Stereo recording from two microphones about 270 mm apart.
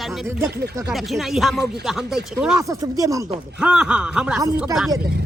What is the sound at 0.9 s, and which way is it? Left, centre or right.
Speech, centre.